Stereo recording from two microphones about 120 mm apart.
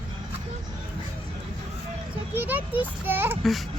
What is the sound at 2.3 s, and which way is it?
A child's voice, 15° right (ahead or behind).